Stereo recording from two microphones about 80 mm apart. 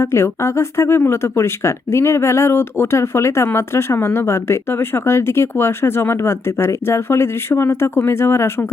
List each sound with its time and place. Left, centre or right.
0.0 s speech: left